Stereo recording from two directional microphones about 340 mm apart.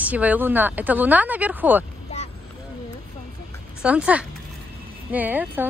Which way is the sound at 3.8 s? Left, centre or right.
Centre.